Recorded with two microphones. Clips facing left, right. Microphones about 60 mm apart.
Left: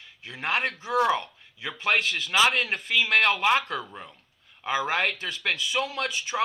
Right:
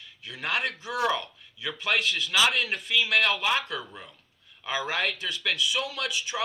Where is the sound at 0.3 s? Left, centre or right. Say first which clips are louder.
Left 2 dB; left.